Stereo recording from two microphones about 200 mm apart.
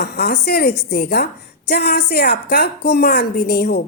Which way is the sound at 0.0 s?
50° left (ahead or behind).